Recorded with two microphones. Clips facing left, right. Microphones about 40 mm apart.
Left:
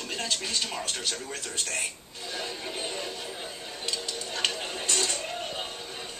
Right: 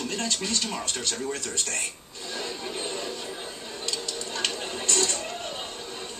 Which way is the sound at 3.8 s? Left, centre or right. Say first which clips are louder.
Right 1 dB; left.